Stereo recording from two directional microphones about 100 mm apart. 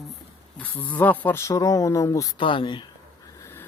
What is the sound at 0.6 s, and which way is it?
Speech, 15° left (ahead or behind).